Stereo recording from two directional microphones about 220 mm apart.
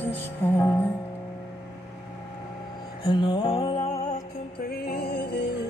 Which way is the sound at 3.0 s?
20° left (ahead or behind).